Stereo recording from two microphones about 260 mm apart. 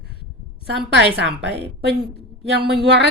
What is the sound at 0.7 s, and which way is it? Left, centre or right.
Speech, right.